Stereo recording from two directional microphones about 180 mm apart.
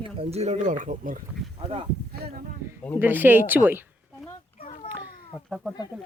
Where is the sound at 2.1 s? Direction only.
60° right (ahead or behind).